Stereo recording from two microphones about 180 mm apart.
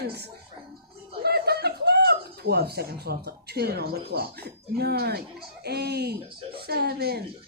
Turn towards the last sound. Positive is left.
turn(degrees=-60)  # may be behind; listen again after turning